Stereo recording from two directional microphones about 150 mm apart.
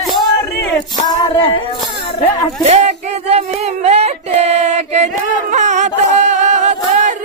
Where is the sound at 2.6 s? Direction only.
50° right (ahead or behind).